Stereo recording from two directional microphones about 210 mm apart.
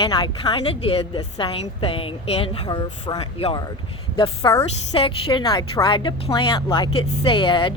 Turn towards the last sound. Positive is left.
turn(degrees=25)  # may be behind; listen again after turning